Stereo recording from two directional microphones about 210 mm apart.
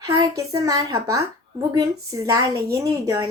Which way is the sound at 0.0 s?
15° right (ahead or behind).